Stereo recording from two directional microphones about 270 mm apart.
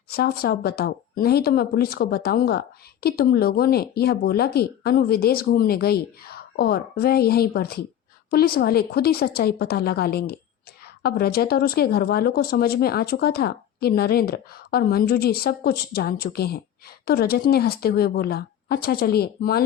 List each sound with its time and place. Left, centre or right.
0.1 s speech: left